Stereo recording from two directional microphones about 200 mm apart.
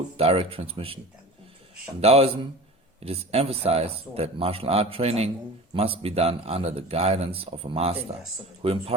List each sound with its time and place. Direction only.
0.2 s speech: 30° right (ahead or behind)
2.0 s speech: 30° right (ahead or behind)